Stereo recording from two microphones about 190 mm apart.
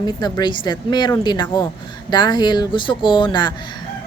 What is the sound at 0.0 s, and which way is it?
Speech, 20° left (ahead or behind).